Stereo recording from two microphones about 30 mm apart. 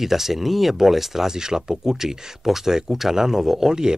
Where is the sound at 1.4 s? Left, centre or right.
Right.